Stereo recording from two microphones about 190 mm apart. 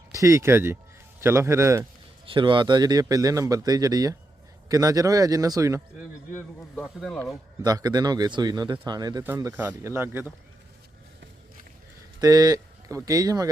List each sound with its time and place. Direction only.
0.1 s speech: 15° right (ahead or behind)
2.2 s speech: 25° right (ahead or behind)
6.7 s speech: 5° left (ahead or behind)
7.6 s speech: 20° right (ahead or behind)
12.2 s speech: 20° right (ahead or behind)